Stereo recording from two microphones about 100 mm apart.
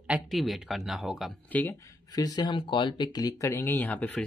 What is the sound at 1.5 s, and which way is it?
Speech, 15° left (ahead or behind).